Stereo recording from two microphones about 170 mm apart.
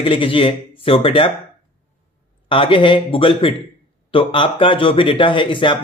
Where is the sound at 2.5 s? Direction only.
30° left (ahead or behind).